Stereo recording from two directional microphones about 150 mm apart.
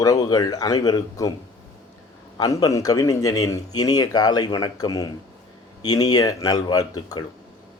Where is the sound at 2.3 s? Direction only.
25° left (ahead or behind).